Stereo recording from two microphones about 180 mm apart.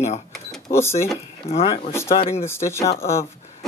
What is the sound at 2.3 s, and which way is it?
Speech, 15° left (ahead or behind).